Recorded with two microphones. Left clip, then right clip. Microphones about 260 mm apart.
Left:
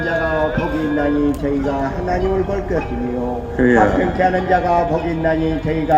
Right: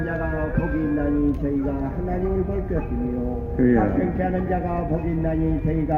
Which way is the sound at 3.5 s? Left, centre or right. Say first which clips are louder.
Left 7 dB; left.